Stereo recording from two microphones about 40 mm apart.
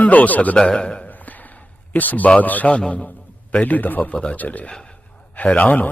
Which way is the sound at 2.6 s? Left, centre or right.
Left.